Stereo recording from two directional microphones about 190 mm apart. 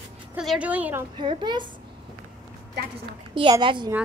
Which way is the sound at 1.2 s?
25° right (ahead or behind).